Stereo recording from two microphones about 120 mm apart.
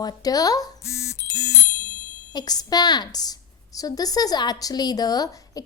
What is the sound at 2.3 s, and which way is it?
A woman's voice, 35° left (ahead or behind).